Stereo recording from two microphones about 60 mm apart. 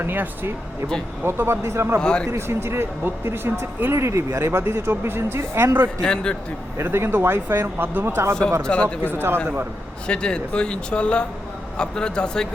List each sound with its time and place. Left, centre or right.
0.0 s speech: right
2.0 s speech: centre
2.3 s speech: right
3.9 s speech: right
6.0 s speech: centre
6.7 s speech: right
8.6 s speech: centre
9.1 s speech: right
10.1 s speech: centre